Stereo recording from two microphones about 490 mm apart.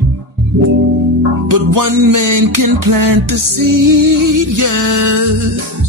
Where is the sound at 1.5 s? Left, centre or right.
Right.